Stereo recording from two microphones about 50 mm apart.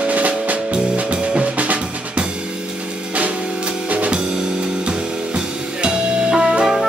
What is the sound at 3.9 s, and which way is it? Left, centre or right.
Music, right.